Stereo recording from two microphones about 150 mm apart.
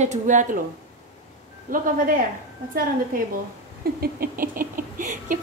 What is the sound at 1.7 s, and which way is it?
Speech, 65° right (ahead or behind).